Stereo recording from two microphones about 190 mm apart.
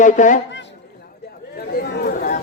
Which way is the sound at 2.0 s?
45° left (ahead or behind).